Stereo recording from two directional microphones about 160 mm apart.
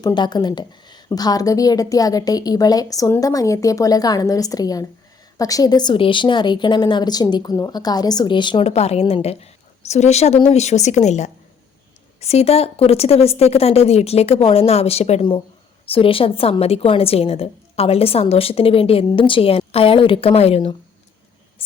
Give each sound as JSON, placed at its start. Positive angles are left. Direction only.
{"t": 0.0, "sound": "a woman's voice", "side_deg": 25}